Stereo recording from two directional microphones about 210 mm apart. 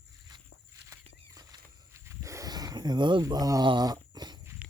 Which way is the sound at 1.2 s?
15° right (ahead or behind).